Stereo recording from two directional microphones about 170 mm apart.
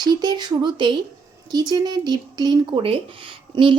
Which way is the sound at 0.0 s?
25° right (ahead or behind).